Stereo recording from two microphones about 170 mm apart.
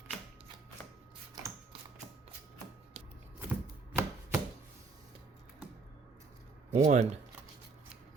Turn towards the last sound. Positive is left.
turn(degrees=-40)  # may be behind; listen again after turning